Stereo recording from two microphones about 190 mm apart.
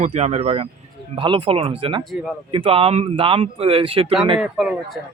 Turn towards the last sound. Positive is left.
turn(degrees=-5)  # may be behind; listen again after turning